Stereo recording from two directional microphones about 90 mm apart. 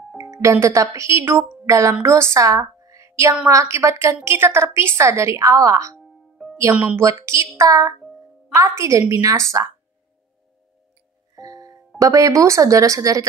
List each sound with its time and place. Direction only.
0.2 s a woman's voice: 35° right (ahead or behind)
5.9 s music: centre (ahead or behind)
6.7 s a woman's voice: 15° right (ahead or behind)
7.0 s a woman's voice: 35° right (ahead or behind)
11.3 s music: 40° right (ahead or behind)
12.0 s a woman's voice: 40° right (ahead or behind)